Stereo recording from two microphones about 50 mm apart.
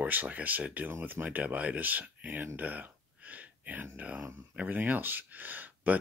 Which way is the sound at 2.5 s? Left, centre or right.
Right.